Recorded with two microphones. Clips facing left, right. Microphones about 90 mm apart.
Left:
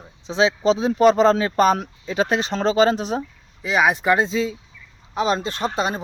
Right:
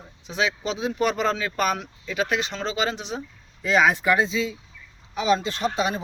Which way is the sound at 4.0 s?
30° left (ahead or behind).